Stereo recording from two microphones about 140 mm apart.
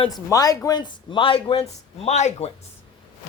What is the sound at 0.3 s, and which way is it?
Speech, 25° left (ahead or behind).